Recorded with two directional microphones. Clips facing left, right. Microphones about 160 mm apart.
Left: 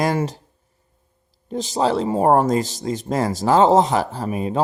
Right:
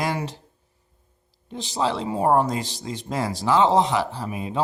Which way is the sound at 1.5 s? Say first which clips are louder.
Left 5 dB; 45° left (ahead or behind).